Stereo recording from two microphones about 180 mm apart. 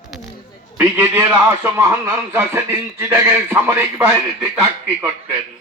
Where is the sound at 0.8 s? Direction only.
15° right (ahead or behind).